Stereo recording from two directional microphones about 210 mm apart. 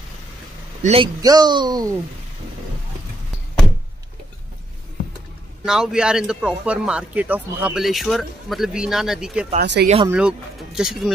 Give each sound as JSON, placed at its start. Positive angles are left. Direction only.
{"t": 0.8, "sound": "speech", "side_deg": -25}
{"t": 5.7, "sound": "speech", "side_deg": -5}
{"t": 9.6, "sound": "speech", "side_deg": -50}
{"t": 10.0, "sound": "speech", "side_deg": -5}